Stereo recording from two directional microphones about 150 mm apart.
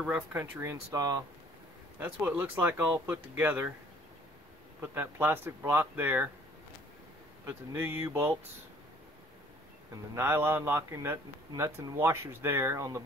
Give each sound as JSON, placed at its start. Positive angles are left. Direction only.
{"t": 0.0, "sound": "a man's voice", "side_deg": -10}
{"t": 2.0, "sound": "a man's voice", "side_deg": -15}
{"t": 4.7, "sound": "a man's voice", "side_deg": -15}
{"t": 7.4, "sound": "a man's voice", "side_deg": -15}
{"t": 10.1, "sound": "a man's voice", "side_deg": -15}